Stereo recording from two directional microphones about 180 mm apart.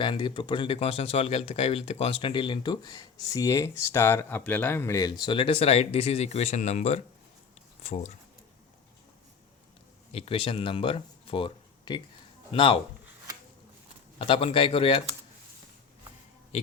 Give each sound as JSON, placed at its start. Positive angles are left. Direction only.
{"t": 0.0, "sound": "speech", "side_deg": 25}
{"t": 5.2, "sound": "speech", "side_deg": 30}
{"t": 10.1, "sound": "speech", "side_deg": 30}
{"t": 14.2, "sound": "speech", "side_deg": 30}